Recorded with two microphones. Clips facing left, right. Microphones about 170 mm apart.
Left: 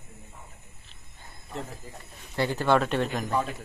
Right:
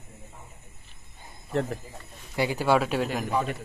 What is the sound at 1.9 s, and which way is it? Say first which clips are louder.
A man's voice: even; 10° right (ahead or behind).